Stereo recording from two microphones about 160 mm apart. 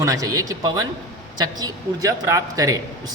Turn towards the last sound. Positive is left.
turn(degrees=-20)  # may be behind; listen again after turning